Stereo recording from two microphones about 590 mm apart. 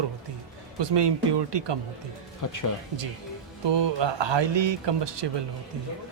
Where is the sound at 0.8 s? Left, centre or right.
Right.